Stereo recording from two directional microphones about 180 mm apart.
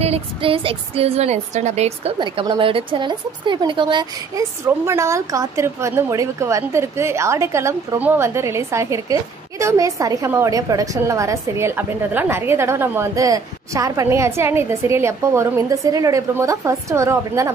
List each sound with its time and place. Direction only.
0.0 s speech: 35° right (ahead or behind); by 17.5 s 15° right (ahead or behind)